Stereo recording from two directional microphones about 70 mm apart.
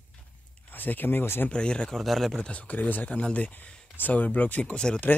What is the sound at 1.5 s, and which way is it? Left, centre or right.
Speech, centre.